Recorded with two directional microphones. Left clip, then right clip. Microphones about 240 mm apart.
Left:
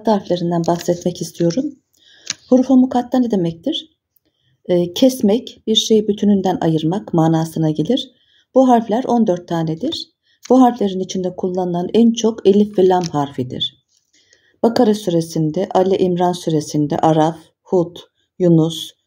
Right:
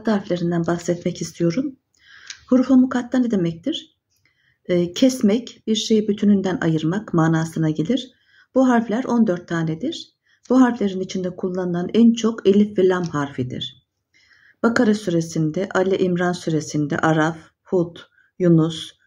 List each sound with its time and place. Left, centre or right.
0.0 s speech: centre
0.6 s speech: left
1.0 s speech: centre
1.5 s a sound: centre
2.6 s speech: centre